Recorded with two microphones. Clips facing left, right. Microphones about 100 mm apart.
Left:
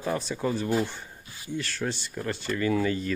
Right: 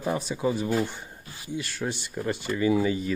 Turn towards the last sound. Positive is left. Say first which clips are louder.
# right 2 dB
turn(degrees=-10)  # may be behind; listen again after turning